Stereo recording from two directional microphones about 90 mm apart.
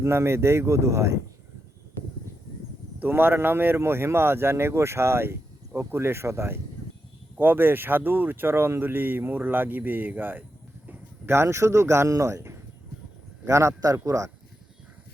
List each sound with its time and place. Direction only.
0.0 s speech: 30° right (ahead or behind)
3.0 s speech: 25° right (ahead or behind)